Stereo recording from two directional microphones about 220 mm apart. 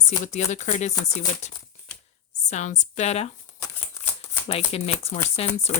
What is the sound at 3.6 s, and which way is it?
Shuffling cards, 10° left (ahead or behind).